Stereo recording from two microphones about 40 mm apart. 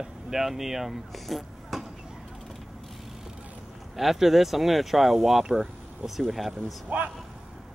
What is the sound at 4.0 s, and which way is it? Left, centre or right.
Speech, centre.